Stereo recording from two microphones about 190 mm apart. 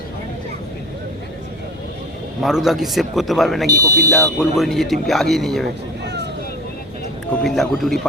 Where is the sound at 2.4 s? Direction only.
Centre (ahead or behind).